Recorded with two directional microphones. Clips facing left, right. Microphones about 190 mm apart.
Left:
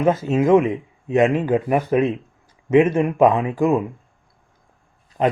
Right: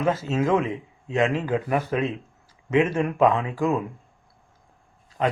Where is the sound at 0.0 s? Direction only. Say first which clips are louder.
Left 5 dB; 15° left (ahead or behind).